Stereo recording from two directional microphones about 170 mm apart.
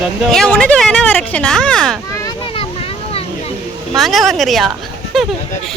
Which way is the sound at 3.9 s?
Centre (ahead or behind).